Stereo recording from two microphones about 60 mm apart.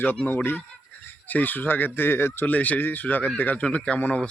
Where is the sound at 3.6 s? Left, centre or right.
Centre.